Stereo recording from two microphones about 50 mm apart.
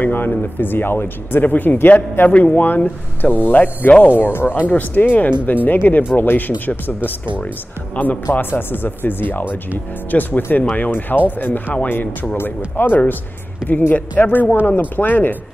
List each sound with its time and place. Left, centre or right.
0.0 s speech: left
4.6 s speech: left
8.5 s speech: left